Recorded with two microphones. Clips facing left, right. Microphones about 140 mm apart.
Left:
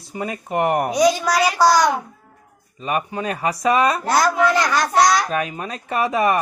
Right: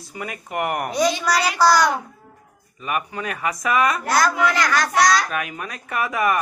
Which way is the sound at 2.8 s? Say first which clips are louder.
Left 3 dB; 30° left (ahead or behind).